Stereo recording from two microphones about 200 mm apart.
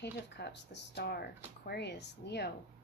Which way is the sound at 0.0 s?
55° left (ahead or behind).